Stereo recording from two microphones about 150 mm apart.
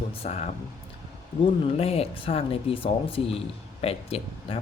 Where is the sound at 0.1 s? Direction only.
40° left (ahead or behind).